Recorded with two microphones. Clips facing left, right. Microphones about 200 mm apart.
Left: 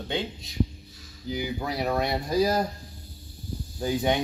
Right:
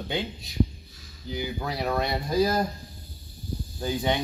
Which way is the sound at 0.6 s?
55° right (ahead or behind).